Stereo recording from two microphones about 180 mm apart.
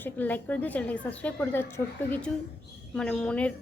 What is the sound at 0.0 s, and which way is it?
A woman's voice, 10° left (ahead or behind).